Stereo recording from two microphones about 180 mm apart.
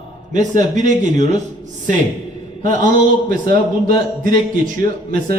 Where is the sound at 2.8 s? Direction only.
50° right (ahead or behind).